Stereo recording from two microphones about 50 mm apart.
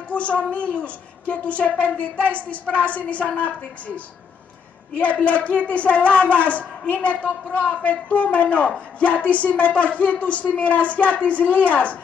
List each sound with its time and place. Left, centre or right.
0.1 s a woman's voice: left
5.1 s speech: left